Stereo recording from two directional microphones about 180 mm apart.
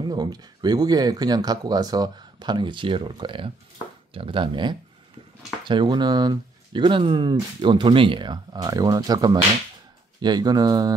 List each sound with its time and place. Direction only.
0.0 s speech: 20° right (ahead or behind)